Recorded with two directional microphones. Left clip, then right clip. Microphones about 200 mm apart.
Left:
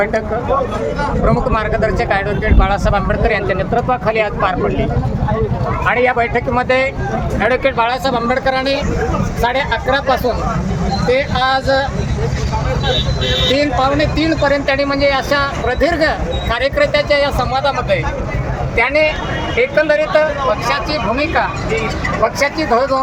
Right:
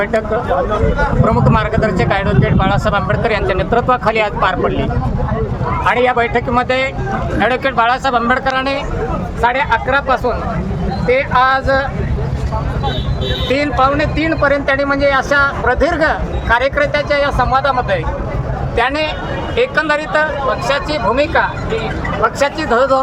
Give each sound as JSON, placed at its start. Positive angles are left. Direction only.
{"t": 1.3, "sound": "speech", "side_deg": -5}
{"t": 13.5, "sound": "speech", "side_deg": 10}
{"t": 18.8, "sound": "speech", "side_deg": -20}
{"t": 20.7, "sound": "speech", "side_deg": -35}